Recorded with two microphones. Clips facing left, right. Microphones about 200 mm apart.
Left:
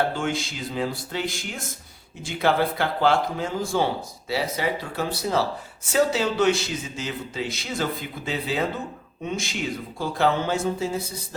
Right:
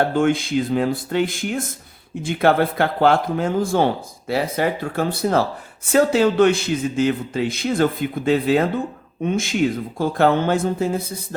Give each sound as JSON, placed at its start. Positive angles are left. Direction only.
{"t": 0.1, "sound": "speech", "side_deg": -55}